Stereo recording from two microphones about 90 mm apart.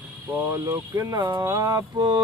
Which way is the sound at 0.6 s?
40° right (ahead or behind).